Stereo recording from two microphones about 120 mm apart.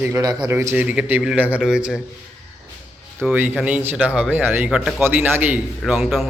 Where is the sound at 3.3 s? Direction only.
15° right (ahead or behind).